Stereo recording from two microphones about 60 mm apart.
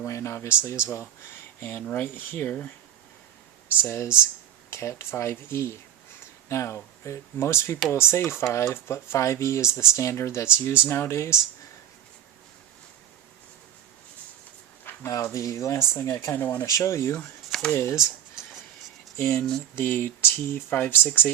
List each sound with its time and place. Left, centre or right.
0.0 s speech: left
3.8 s speech: left
15.0 s speech: left
16.3 s speech: left
16.6 s speech: left
19.1 s speech: left
19.7 s speech: left